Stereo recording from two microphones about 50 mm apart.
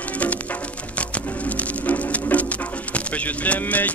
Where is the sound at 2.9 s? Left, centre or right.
Left.